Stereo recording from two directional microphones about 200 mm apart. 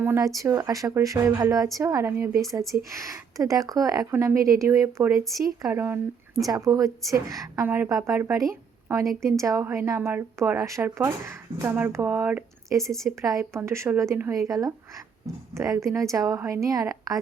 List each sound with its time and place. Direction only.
0.0 s speech: 10° right (ahead or behind)
12.9 s a woman's voice: centre (ahead or behind)
13.2 s speech: 15° right (ahead or behind)